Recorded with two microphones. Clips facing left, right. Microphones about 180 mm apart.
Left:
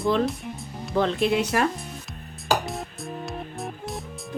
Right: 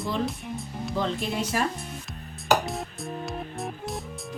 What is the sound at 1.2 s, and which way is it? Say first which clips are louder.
Speech: left 6 dB; 70° left (ahead or behind).